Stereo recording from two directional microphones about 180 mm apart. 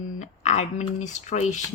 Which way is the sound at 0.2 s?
40° left (ahead or behind).